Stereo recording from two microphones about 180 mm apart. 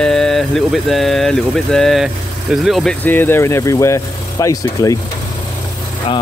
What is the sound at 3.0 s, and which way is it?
Speech, 10° left (ahead or behind).